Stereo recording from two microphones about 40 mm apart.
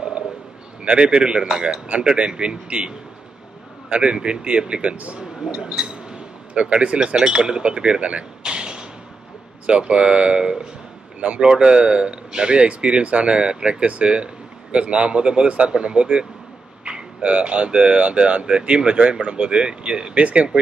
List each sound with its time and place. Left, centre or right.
0.8 s a man's voice: right
3.9 s a man's voice: right
5.5 s a man's voice: centre